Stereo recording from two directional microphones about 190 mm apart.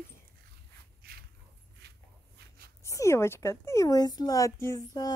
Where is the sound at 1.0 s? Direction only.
55° right (ahead or behind).